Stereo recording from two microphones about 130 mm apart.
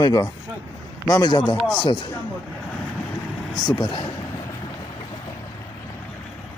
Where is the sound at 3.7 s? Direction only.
40° left (ahead or behind).